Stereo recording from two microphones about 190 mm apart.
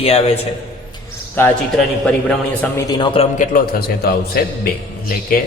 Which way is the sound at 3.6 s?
50° left (ahead or behind).